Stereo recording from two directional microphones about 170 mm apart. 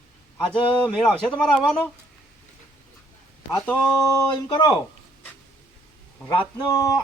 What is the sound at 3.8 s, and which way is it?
Speech, 20° left (ahead or behind).